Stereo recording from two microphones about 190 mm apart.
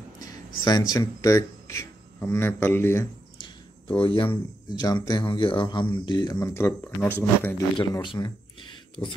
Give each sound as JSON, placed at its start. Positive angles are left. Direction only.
{"t": 0.2, "sound": "speech", "side_deg": 20}
{"t": 3.3, "sound": "speech", "side_deg": 25}
{"t": 7.7, "sound": "speech", "side_deg": 25}